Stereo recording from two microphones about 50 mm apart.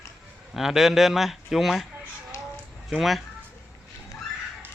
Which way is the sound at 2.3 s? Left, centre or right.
Left.